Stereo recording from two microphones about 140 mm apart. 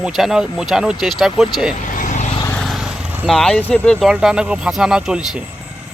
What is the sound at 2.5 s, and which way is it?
Speech, centre (ahead or behind).